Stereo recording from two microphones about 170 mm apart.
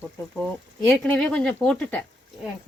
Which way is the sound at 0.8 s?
5° left (ahead or behind).